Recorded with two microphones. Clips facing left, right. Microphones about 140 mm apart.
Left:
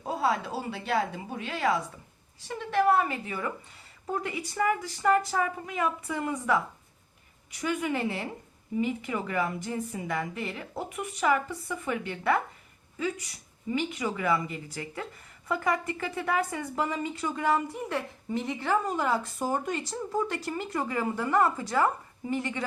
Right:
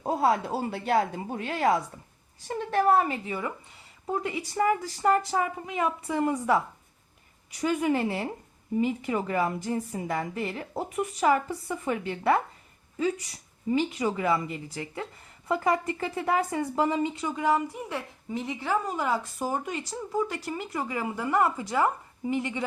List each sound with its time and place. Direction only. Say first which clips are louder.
0.0 s a woman's voice: right 3 dB; 45° right (ahead or behind)
13.7 s a woman's voice: right 4 dB; 30° right (ahead or behind)